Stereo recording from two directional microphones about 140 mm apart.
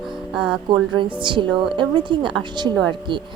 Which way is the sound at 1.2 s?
35° right (ahead or behind).